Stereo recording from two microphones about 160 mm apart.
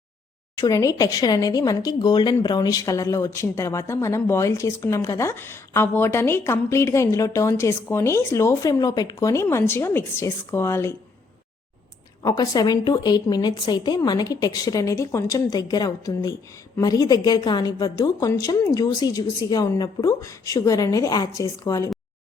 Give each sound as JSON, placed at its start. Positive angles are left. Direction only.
{"t": 0.5, "sound": "speech", "side_deg": 20}
{"t": 12.2, "sound": "a woman's voice", "side_deg": 25}